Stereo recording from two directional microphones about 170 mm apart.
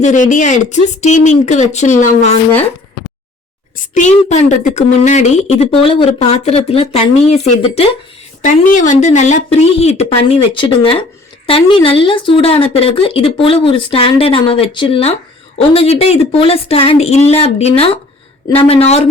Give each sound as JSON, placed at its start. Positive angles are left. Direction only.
{"t": 0.0, "sound": "speech", "side_deg": 45}
{"t": 3.8, "sound": "a woman's voice", "side_deg": 45}
{"t": 8.4, "sound": "a woman's voice", "side_deg": 50}